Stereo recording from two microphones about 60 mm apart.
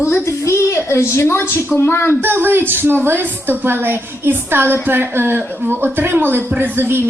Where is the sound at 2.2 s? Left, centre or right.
Right.